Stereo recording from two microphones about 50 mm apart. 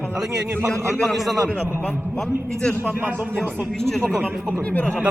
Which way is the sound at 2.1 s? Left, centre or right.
Centre.